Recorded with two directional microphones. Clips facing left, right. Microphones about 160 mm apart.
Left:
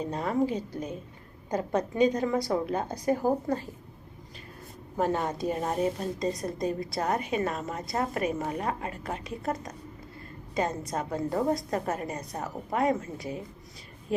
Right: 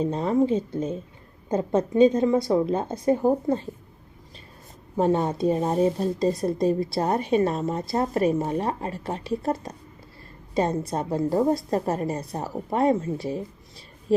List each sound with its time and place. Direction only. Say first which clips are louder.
0.0 s a woman's voice: right 6 dB; 25° right (ahead or behind)
4.9 s speech: right 6 dB; 25° right (ahead or behind)